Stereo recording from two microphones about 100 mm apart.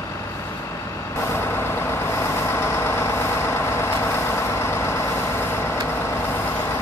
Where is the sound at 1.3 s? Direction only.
25° left (ahead or behind).